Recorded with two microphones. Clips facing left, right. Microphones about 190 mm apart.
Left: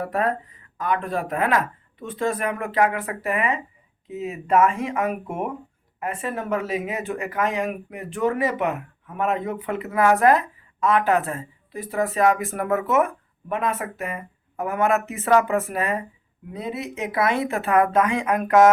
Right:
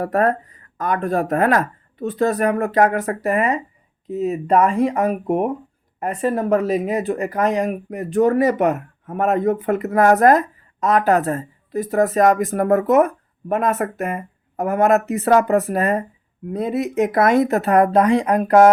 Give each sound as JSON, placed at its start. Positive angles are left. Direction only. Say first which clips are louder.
{"t": 0.0, "sound": "speech", "louder": "right 6 dB", "side_deg": -45}